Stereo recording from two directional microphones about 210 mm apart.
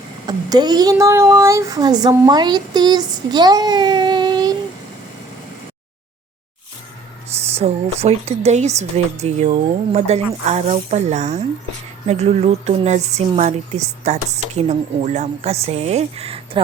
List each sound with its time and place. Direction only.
0.3 s speech: 20° right (ahead or behind)
7.4 s speech: 30° right (ahead or behind)